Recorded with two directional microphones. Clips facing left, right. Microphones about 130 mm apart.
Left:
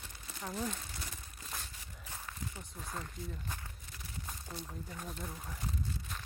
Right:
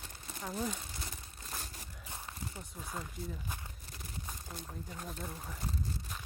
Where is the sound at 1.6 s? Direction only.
40° right (ahead or behind).